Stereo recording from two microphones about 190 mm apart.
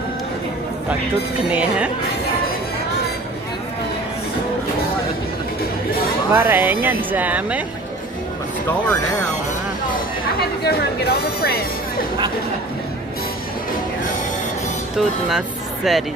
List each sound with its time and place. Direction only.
6.3 s speech: 10° right (ahead or behind)
10.6 s speech: 55° left (ahead or behind)
14.9 s speech: 5° right (ahead or behind)